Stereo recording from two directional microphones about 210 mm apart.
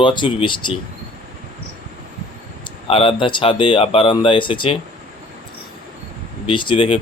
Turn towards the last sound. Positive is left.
turn(degrees=25)  # may be behind; listen again after turning